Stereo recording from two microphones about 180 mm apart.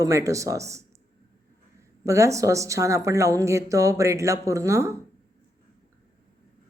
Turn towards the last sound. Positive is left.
turn(degrees=-15)  # may be behind; listen again after turning